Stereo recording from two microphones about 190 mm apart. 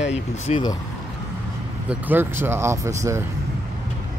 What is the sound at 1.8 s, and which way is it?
Speech, 10° right (ahead or behind).